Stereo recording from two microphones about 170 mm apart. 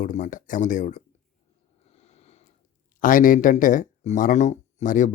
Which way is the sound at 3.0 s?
55° left (ahead or behind).